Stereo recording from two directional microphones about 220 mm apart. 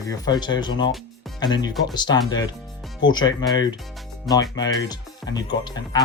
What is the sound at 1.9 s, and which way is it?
Speech, 20° left (ahead or behind).